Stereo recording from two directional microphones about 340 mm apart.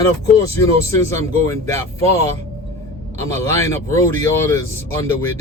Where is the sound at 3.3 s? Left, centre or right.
Centre.